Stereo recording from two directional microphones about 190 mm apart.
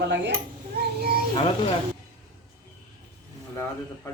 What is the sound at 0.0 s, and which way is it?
Speech, 70° right (ahead or behind).